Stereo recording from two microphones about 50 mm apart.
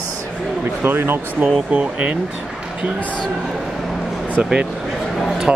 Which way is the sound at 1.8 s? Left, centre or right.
Right.